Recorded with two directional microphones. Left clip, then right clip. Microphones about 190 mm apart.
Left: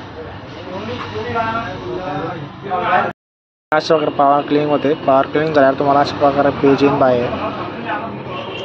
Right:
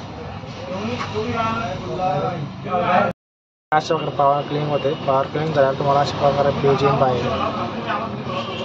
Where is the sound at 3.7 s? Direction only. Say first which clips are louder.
Left 5 dB; 30° left (ahead or behind).